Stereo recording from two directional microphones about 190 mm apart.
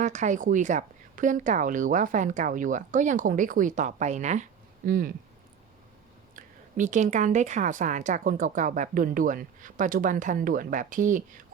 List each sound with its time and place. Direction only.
0.0 s a woman's voice: 40° right (ahead or behind)
4.9 s a woman's voice: 50° right (ahead or behind)
6.3 s a woman's voice: 40° right (ahead or behind)